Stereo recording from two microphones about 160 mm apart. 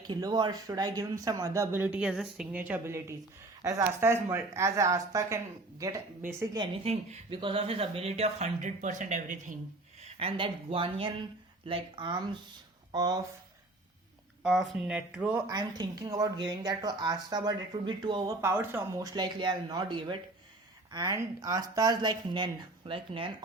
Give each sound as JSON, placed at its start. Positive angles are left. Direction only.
{"t": 0.1, "sound": "a woman's voice", "side_deg": -25}
{"t": 6.8, "sound": "speech", "side_deg": -35}
{"t": 10.0, "sound": "speech", "side_deg": -35}
{"t": 14.4, "sound": "speech", "side_deg": -5}
{"t": 15.4, "sound": "speech", "side_deg": -25}
{"t": 18.4, "sound": "speech", "side_deg": -15}